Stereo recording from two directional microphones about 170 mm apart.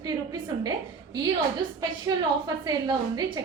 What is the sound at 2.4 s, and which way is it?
Speech, 25° right (ahead or behind).